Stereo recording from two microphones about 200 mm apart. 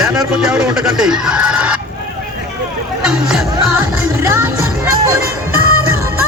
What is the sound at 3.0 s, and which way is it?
Speech, 5° right (ahead or behind).